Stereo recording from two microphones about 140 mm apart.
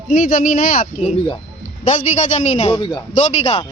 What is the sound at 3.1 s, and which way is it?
Speech, 55° left (ahead or behind).